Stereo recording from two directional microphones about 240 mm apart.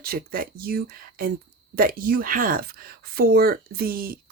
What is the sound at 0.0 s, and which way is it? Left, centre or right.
Speech, right.